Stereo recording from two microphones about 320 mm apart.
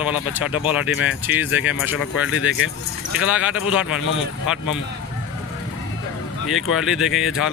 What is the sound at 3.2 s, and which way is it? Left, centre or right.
Speech, centre.